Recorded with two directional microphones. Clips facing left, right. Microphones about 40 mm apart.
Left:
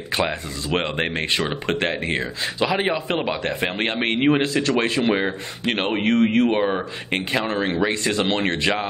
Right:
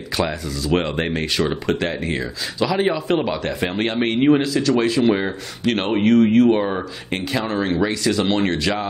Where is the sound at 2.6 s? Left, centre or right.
Left.